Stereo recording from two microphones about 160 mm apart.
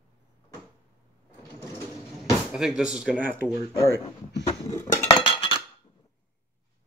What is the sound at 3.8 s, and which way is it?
Speech, 20° right (ahead or behind).